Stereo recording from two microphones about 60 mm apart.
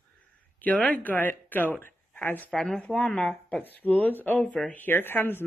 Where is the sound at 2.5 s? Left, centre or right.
Centre.